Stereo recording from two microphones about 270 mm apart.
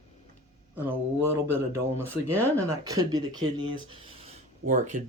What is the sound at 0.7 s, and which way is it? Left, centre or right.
Speech, centre.